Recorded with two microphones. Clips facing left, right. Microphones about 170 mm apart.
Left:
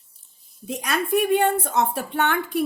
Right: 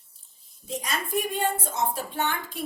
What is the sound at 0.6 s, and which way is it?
A woman's voice, 65° left (ahead or behind).